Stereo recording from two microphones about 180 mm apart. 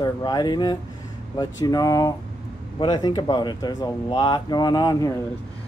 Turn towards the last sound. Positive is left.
turn(degrees=20)  # may be behind; listen again after turning